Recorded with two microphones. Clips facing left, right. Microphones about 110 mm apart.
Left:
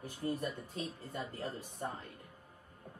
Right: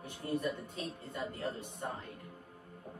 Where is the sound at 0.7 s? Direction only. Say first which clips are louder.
Even; centre (ahead or behind).